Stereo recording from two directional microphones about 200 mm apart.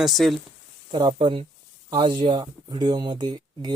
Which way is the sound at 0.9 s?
25° right (ahead or behind).